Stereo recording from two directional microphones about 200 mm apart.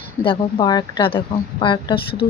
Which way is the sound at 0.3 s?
25° left (ahead or behind).